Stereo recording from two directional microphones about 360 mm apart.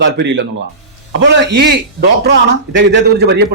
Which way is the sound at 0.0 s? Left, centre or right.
Right.